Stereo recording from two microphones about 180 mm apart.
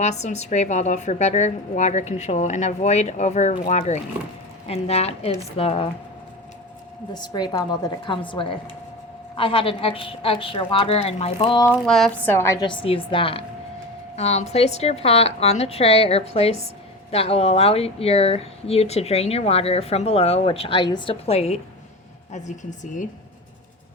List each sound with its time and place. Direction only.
0.0 s speech: 40° left (ahead or behind)
7.1 s a woman's voice: 25° left (ahead or behind)
11.9 s a woman's voice: 5° left (ahead or behind)
12.6 s a woman's voice: 30° left (ahead or behind)